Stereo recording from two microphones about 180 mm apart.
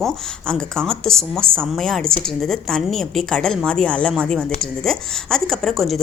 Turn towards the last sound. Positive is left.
turn(degrees=0)  # may be behind; listen again after turning